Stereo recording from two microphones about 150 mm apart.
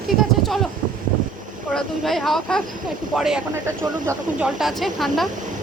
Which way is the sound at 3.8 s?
15° right (ahead or behind).